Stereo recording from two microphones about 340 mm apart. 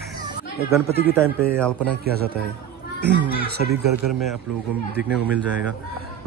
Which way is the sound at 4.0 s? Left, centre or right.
Right.